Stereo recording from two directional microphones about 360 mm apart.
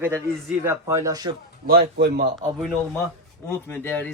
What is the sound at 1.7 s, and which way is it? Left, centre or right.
Speech, right.